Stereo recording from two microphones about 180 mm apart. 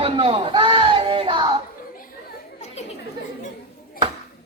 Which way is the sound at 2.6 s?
35° left (ahead or behind).